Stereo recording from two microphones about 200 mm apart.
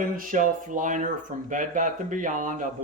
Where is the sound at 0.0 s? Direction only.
40° right (ahead or behind).